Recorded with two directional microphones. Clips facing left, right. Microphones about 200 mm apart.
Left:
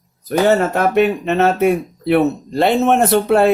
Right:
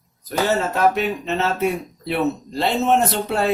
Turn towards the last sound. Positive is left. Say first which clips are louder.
# left 8 dB
turn(degrees=55)  # may be behind; listen again after turning